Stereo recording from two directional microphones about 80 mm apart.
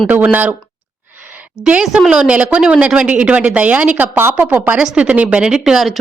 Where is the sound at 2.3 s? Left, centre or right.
Centre.